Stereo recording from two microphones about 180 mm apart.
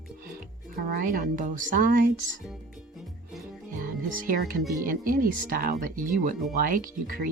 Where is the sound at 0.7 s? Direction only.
50° right (ahead or behind).